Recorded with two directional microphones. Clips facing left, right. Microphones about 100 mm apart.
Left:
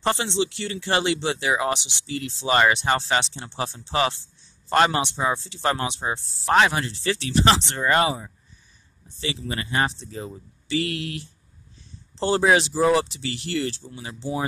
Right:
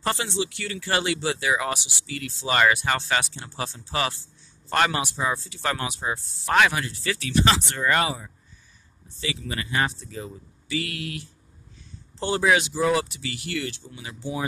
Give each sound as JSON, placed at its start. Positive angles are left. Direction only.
{"t": 0.0, "sound": "speech", "side_deg": 25}